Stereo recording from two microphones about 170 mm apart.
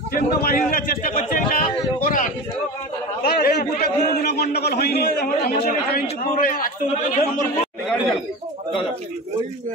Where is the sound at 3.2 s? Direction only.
65° left (ahead or behind); by 7.4 s 50° left (ahead or behind).